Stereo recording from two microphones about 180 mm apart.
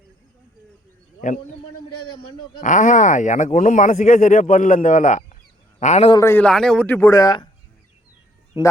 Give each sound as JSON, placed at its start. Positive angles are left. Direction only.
{"t": 1.2, "sound": "speech", "side_deg": 45}
{"t": 2.1, "sound": "a man's voice", "side_deg": 25}
{"t": 2.6, "sound": "a man's voice", "side_deg": 45}
{"t": 6.1, "sound": "a man's voice", "side_deg": 15}
{"t": 8.6, "sound": "a man's voice", "side_deg": 30}